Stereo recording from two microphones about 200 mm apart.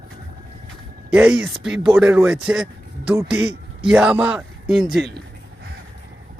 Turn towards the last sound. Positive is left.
turn(degrees=0)  # may be behind; listen again after turning